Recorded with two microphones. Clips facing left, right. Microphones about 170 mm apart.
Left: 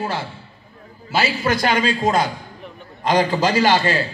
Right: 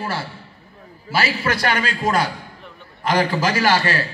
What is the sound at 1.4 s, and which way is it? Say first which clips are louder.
A man's voice: left 3 dB; 20° left (ahead or behind).